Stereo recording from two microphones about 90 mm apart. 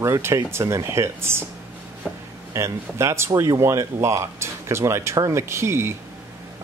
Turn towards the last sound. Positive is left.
turn(degrees=-30)  # may be behind; listen again after turning